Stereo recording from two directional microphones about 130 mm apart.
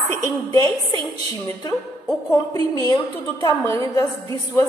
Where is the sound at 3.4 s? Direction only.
25° left (ahead or behind).